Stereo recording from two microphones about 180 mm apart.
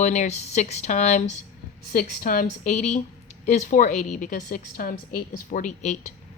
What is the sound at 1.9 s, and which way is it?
A woman's voice, 55° left (ahead or behind).